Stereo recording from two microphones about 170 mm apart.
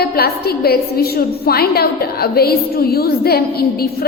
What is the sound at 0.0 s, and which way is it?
A woman's voice, 65° left (ahead or behind).